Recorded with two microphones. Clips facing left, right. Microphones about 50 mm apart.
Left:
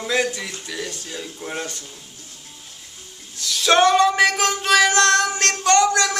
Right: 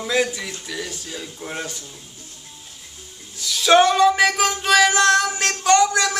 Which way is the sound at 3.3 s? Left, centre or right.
Centre.